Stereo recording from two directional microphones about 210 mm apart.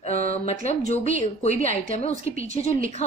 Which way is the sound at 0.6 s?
30° left (ahead or behind).